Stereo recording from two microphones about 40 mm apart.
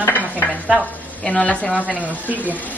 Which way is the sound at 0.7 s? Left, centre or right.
Left.